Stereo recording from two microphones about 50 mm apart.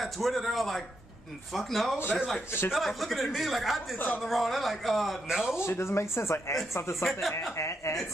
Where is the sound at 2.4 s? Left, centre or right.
Left.